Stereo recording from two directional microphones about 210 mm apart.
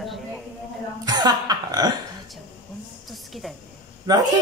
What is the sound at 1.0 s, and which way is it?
Speech, 20° right (ahead or behind).